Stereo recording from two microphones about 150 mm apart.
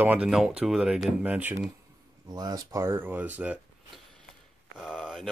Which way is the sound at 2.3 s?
25° right (ahead or behind).